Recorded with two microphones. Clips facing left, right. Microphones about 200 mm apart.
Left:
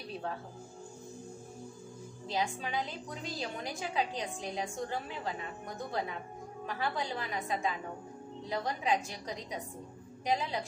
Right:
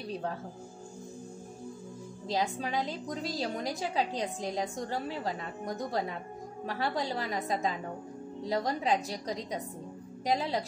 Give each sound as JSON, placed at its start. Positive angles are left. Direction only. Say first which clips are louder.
{"t": 2.2, "sound": "a woman's voice", "louder": "right 3 dB", "side_deg": -40}